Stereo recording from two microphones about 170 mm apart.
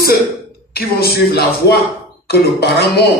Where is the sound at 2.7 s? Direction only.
70° left (ahead or behind).